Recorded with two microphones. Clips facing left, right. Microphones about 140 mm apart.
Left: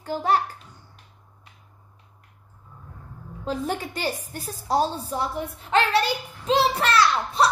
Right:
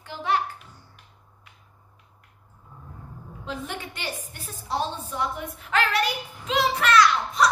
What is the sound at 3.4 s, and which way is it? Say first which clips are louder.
A child's voice: left 6 dB; 40° left (ahead or behind).